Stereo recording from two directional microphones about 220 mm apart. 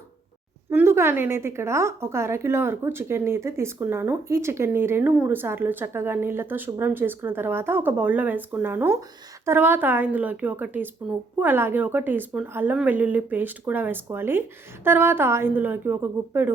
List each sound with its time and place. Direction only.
0.7 s a woman's voice: 10° right (ahead or behind)